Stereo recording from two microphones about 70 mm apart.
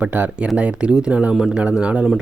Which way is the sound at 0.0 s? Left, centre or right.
Right.